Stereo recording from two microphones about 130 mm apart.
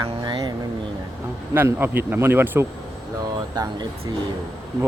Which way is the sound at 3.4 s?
35° right (ahead or behind).